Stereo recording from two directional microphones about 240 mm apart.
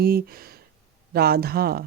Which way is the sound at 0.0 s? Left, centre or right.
Right.